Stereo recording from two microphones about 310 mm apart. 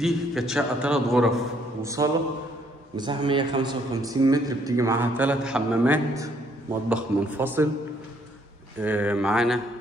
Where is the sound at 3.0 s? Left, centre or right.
Centre.